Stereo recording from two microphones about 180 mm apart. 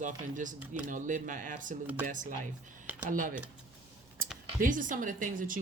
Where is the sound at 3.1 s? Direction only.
50° right (ahead or behind).